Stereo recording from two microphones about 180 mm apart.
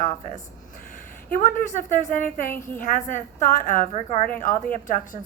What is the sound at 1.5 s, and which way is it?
A woman's voice, 45° left (ahead or behind).